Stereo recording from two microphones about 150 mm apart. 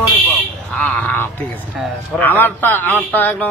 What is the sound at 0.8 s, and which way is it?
A man's voice, 10° left (ahead or behind).